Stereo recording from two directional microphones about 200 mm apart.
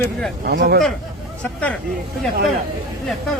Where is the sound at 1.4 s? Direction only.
5° left (ahead or behind).